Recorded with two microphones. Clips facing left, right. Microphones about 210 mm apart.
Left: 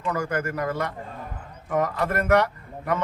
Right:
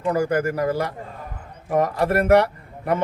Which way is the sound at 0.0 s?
30° right (ahead or behind).